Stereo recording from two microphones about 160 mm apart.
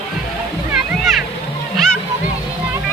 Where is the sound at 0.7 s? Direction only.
Centre (ahead or behind).